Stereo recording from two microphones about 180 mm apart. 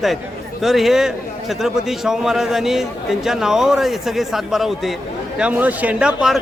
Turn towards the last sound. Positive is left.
turn(degrees=-5)  # may be behind; listen again after turning